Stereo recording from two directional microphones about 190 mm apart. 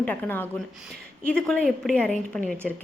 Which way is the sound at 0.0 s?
10° left (ahead or behind).